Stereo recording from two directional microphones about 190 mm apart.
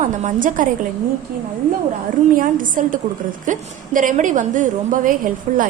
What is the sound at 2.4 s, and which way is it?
Speech, 45° right (ahead or behind).